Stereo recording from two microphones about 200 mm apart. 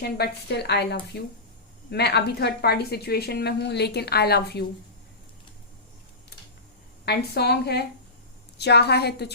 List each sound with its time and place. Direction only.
0.0 s a woman's voice: 55° left (ahead or behind)
7.0 s a woman's voice: 55° left (ahead or behind)